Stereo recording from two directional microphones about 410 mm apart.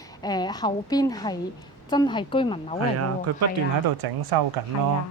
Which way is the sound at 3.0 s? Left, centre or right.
Right.